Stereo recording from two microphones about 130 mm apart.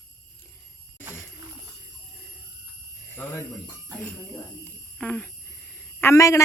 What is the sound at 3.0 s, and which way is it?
Alarm, 15° left (ahead or behind).